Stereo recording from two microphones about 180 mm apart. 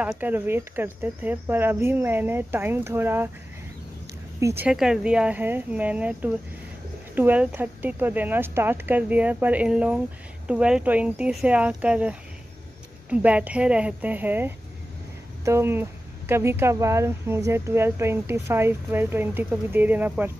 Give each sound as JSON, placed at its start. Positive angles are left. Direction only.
{"t": 0.0, "sound": "speech", "side_deg": -10}
{"t": 4.4, "sound": "speech", "side_deg": -15}
{"t": 4.6, "sound": "speech", "side_deg": -5}